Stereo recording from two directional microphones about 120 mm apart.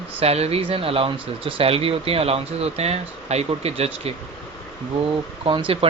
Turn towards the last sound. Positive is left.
turn(degrees=-45)  # may be behind; listen again after turning